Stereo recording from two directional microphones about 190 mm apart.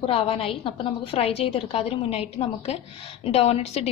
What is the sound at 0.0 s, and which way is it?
A woman's voice, 30° left (ahead or behind).